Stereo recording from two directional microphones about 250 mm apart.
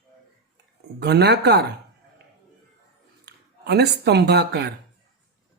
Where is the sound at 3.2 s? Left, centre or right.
Right.